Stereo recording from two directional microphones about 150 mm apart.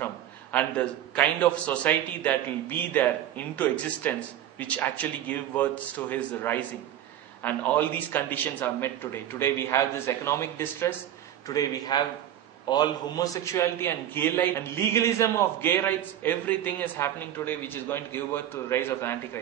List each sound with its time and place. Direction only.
0.0 s a man's voice: 10° left (ahead or behind)